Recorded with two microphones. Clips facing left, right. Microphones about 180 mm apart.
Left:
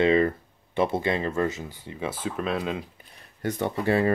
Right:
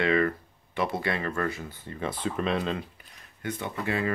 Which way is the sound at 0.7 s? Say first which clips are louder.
Left 4 dB; 25° left (ahead or behind).